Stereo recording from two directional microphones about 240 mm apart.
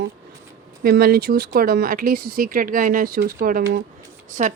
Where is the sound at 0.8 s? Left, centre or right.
Right.